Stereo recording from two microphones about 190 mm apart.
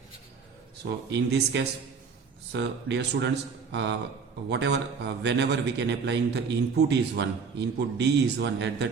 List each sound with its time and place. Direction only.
0.8 s a man's voice: 60° right (ahead or behind)